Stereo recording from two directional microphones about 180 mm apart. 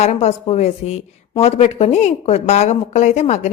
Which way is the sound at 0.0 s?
35° left (ahead or behind).